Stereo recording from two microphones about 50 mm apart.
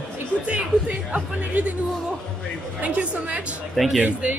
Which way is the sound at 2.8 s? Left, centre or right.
Right.